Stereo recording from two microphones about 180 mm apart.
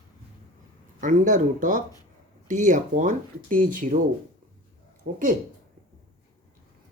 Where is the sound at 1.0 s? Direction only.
45° right (ahead or behind).